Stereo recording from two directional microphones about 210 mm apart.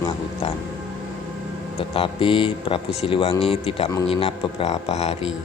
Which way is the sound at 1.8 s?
25° left (ahead or behind).